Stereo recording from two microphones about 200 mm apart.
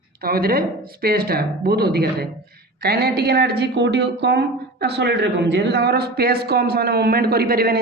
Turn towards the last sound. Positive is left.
turn(degrees=-50)  # may be behind; listen again after turning